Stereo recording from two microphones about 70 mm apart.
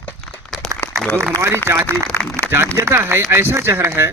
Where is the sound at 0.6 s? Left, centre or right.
Centre.